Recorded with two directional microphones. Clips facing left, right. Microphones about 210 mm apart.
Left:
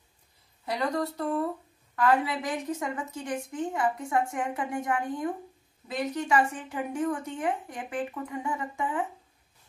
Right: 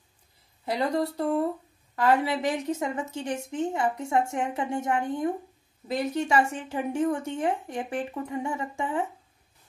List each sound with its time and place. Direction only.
0.7 s a woman's voice: 30° right (ahead or behind)